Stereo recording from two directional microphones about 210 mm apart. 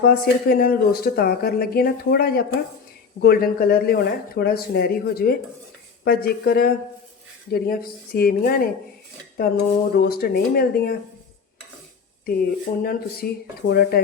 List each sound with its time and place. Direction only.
0.0 s speech: 45° left (ahead or behind)
12.2 s speech: 45° left (ahead or behind)